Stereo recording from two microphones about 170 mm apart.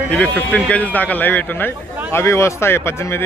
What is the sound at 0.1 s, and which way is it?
Speech, 10° left (ahead or behind).